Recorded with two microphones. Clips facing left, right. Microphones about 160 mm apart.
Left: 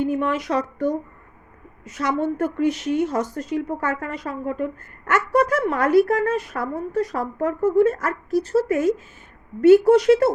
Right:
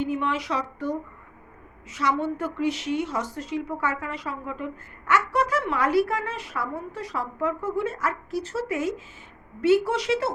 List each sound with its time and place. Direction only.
0.0 s a woman's voice: 45° left (ahead or behind)